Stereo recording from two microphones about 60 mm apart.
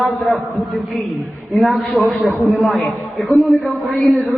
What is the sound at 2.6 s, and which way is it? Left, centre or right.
A man's voice, centre.